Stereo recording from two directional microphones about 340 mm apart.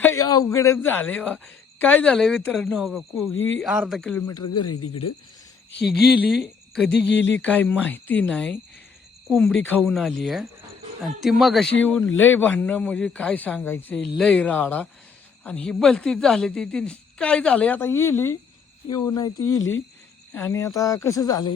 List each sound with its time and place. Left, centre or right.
0.0 s a man's voice: centre
3.3 s speech: left
3.6 s speech: centre
4.4 s speech: left
5.9 s speech: centre
6.9 s speech: left
7.4 s speech: centre